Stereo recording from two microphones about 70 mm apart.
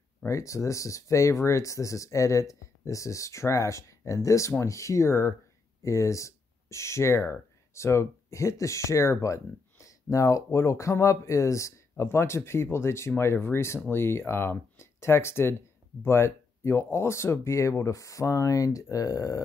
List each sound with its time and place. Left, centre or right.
0.3 s speech: left